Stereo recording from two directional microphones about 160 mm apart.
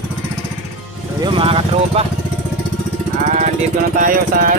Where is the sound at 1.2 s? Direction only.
35° right (ahead or behind).